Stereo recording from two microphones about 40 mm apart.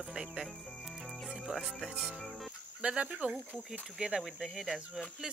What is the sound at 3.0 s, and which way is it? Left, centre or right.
Speech, right.